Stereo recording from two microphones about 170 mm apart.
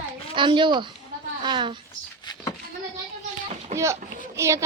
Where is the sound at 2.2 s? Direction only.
25° left (ahead or behind).